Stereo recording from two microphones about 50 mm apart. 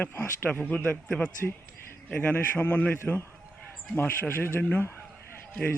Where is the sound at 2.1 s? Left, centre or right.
Left.